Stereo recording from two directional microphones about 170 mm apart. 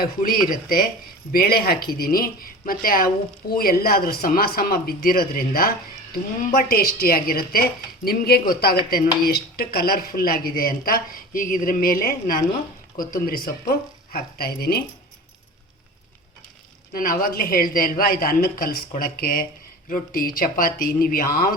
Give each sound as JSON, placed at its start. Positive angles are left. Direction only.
{"t": 0.0, "sound": "a woman's voice", "side_deg": 55}
{"t": 16.9, "sound": "a woman's voice", "side_deg": 55}